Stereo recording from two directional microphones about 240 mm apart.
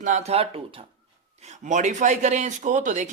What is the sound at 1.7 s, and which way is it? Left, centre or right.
Speech, right.